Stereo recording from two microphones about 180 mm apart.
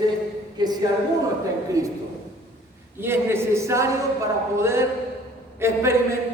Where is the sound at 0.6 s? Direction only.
20° right (ahead or behind).